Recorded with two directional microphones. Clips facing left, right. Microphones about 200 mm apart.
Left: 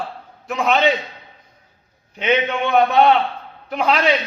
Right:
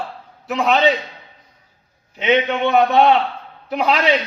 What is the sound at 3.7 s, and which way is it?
Speech, 5° right (ahead or behind).